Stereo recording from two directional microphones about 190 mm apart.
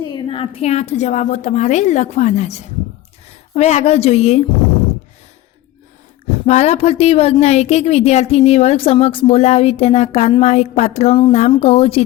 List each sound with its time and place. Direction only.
0.1 s a woman's voice: 25° left (ahead or behind)
6.4 s a woman's voice: 35° left (ahead or behind)